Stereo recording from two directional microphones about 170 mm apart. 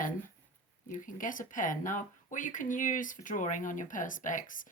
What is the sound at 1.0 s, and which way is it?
Speech, 50° left (ahead or behind).